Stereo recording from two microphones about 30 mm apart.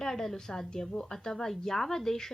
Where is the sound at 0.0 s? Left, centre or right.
Centre.